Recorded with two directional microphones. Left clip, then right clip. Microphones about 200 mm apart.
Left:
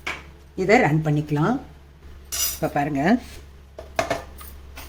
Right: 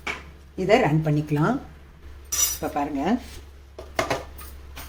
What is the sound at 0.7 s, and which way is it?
Speech, 15° left (ahead or behind).